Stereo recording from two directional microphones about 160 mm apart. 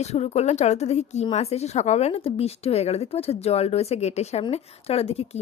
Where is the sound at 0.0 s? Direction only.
45° left (ahead or behind).